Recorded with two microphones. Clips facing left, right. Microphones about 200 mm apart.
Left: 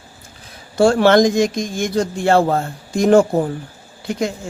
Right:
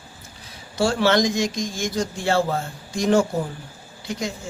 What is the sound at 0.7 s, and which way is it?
Mantra, 55° left (ahead or behind).